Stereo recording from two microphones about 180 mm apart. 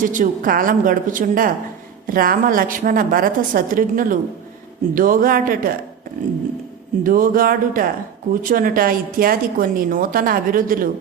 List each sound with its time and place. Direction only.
0.0 s speech: 45° right (ahead or behind)
7.0 s speech: 50° right (ahead or behind)